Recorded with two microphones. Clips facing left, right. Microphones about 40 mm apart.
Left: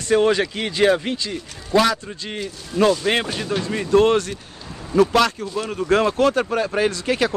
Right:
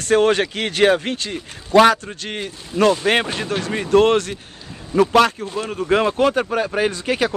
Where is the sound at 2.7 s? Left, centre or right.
Right.